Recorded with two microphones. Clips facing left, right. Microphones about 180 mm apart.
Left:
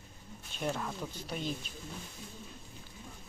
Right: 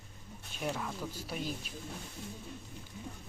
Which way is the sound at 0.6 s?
Centre (ahead or behind).